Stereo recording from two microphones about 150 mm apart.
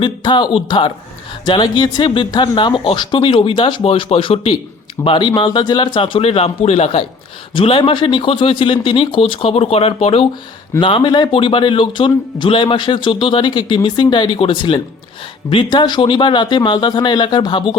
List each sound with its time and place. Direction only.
0.0 s speech: 30° left (ahead or behind)